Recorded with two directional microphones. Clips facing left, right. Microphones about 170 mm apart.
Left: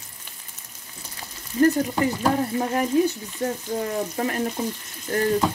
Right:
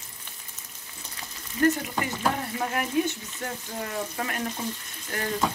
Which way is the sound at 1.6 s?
35° left (ahead or behind).